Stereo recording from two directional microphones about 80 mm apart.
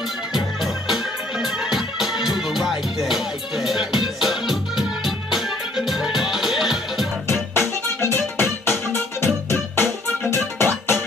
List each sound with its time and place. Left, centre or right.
0.3 s music: centre
7.2 s music: left